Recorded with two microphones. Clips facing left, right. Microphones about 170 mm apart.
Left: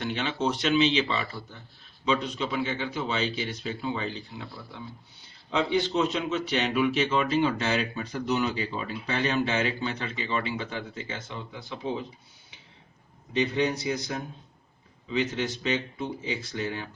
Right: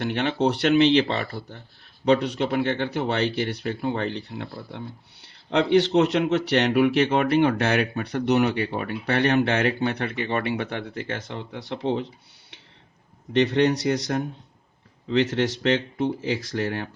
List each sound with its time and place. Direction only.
0.0 s speech: 60° right (ahead or behind)
2.0 s speech: 65° right (ahead or behind)
13.3 s speech: 75° right (ahead or behind)